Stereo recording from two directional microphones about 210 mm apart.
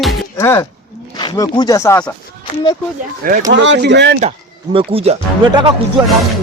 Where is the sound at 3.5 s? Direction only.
60° right (ahead or behind).